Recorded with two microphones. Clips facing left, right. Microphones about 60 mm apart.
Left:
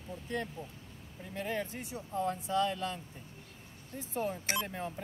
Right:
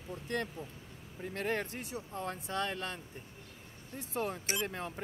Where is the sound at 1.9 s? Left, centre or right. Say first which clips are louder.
Left 5 dB; right.